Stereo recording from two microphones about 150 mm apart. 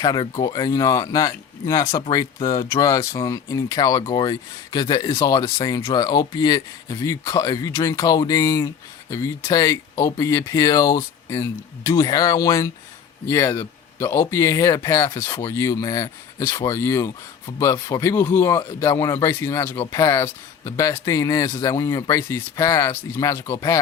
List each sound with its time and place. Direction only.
0.0 s speech: 30° left (ahead or behind)